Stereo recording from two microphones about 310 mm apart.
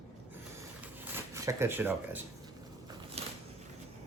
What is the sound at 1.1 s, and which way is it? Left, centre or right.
Speech, centre.